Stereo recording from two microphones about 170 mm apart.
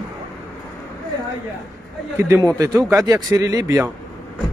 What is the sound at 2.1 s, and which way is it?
Speech, 15° right (ahead or behind).